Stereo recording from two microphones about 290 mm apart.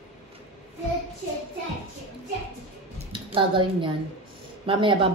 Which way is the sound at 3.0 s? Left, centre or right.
Centre.